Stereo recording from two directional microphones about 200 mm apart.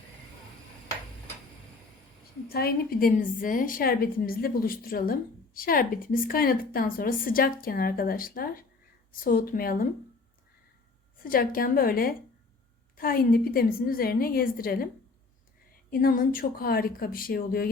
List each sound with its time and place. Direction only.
2.5 s a woman's voice: 50° left (ahead or behind)
11.2 s a woman's voice: 45° left (ahead or behind)
15.9 s a woman's voice: 45° left (ahead or behind)